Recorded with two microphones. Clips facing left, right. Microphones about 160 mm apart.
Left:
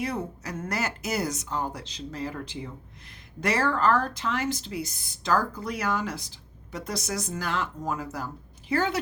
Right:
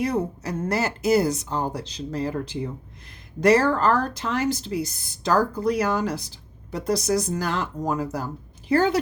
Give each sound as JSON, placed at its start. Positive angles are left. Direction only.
{"t": 0.0, "sound": "speech", "side_deg": -40}